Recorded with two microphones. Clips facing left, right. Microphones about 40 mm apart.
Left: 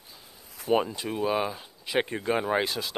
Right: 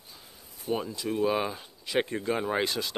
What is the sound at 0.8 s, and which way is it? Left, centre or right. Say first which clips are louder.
Speech: right 1 dB; left.